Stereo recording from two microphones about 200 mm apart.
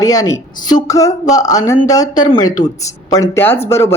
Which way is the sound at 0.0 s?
20° left (ahead or behind).